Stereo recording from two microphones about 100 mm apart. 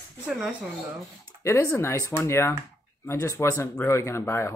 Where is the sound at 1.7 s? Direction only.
30° left (ahead or behind).